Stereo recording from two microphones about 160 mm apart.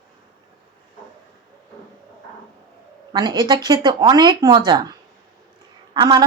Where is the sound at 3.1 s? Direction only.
25° right (ahead or behind).